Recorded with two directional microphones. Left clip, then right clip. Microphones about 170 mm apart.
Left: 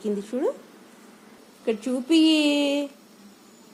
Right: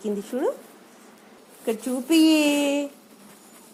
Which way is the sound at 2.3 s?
60° right (ahead or behind).